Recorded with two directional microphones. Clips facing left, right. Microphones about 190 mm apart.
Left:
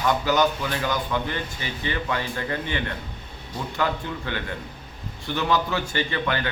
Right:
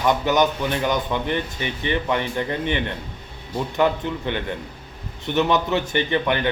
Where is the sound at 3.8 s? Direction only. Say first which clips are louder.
Right 6 dB; 20° right (ahead or behind).